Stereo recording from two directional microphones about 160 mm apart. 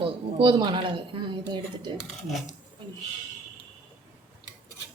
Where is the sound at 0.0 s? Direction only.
30° right (ahead or behind).